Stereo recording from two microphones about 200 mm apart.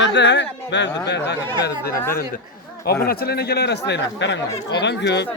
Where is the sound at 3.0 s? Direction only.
50° left (ahead or behind).